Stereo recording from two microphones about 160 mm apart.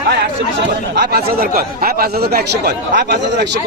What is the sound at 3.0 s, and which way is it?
Speech, 90° right.